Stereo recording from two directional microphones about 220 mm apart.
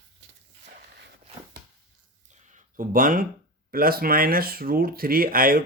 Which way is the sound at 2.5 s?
40° right (ahead or behind).